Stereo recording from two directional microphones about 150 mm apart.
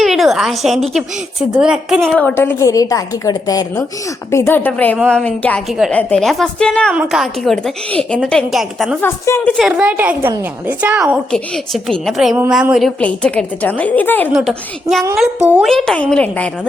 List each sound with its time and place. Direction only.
0.0 s a woman's voice: centre (ahead or behind)
5.6 s a woman's voice: 5° right (ahead or behind)
5.9 s a woman's voice: 10° left (ahead or behind)
6.9 s a woman's voice: 5° right (ahead or behind)
9.0 s a woman's voice: 15° left (ahead or behind)
9.5 s a woman's voice: centre (ahead or behind)
11.3 s a woman's voice: 5° left (ahead or behind)
13.0 s a woman's voice: 10° left (ahead or behind)
14.3 s a woman's voice: centre (ahead or behind)